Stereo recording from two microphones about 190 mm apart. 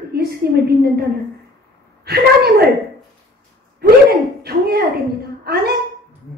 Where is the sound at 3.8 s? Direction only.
55° right (ahead or behind).